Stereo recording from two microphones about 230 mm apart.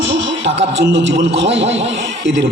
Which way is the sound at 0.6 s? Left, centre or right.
Right.